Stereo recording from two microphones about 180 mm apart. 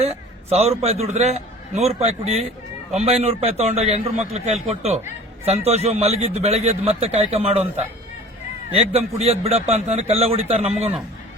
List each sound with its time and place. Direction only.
0.0 s a man's voice: 35° right (ahead or behind)